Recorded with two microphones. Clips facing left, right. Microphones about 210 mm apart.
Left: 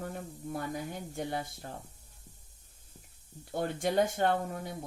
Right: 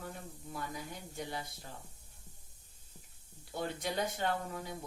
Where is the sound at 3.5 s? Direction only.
50° left (ahead or behind).